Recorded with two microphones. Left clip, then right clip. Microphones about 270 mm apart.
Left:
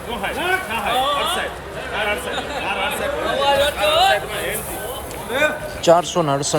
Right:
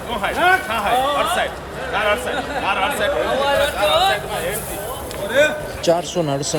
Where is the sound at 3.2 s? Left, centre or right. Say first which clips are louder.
Left 4 dB; left.